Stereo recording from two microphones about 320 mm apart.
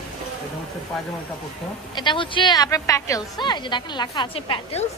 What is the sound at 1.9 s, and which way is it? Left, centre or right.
A woman's voice, centre.